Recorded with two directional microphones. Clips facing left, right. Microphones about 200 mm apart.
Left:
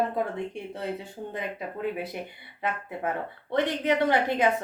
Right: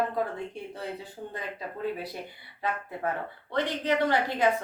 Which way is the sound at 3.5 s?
20° left (ahead or behind).